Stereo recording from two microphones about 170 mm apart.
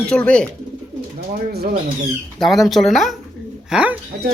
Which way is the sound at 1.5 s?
65° right (ahead or behind).